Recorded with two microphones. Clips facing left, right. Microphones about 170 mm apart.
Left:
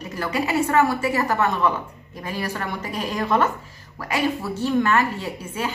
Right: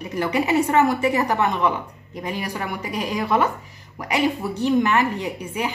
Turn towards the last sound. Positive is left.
turn(degrees=-15)  # may be behind; listen again after turning